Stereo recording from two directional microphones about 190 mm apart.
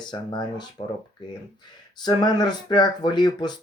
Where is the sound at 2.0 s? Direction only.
20° left (ahead or behind).